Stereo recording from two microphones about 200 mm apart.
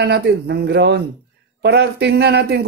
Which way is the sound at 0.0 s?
55° right (ahead or behind).